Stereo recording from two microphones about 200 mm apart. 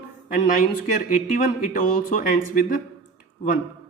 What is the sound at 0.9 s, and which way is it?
Speech, 45° left (ahead or behind).